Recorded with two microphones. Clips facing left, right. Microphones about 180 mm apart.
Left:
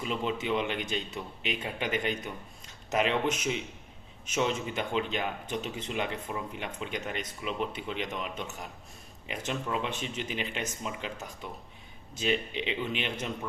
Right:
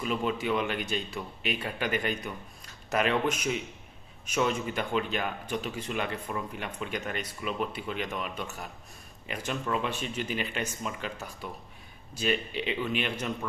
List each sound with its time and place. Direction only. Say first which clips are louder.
0.3 s speech: even; 20° left (ahead or behind)